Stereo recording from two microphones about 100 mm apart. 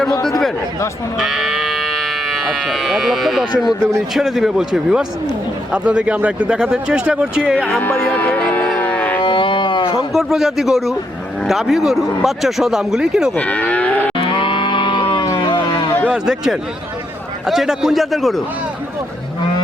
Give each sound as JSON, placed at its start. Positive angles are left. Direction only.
{"t": 0.3, "sound": "chatter", "side_deg": 5}
{"t": 1.2, "sound": "sheep", "side_deg": 0}
{"t": 4.1, "sound": "speech", "side_deg": -5}
{"t": 7.7, "sound": "music", "side_deg": 20}
{"t": 9.2, "sound": "livestock", "side_deg": 55}
{"t": 10.1, "sound": "speech", "side_deg": 0}
{"t": 13.3, "sound": "moo", "side_deg": 15}
{"t": 14.2, "sound": "moo", "side_deg": 55}
{"t": 15.4, "sound": "a sound", "side_deg": 50}
{"t": 16.0, "sound": "speech", "side_deg": -5}